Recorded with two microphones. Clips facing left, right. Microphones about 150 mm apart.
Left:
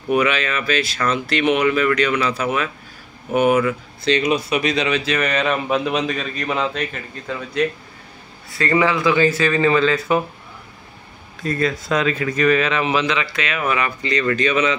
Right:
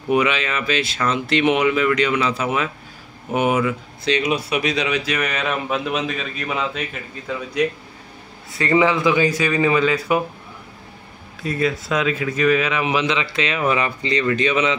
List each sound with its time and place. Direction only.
0.1 s speech: 20° right (ahead or behind)
8.5 s speech: 20° right (ahead or behind)
11.4 s speech: 10° right (ahead or behind)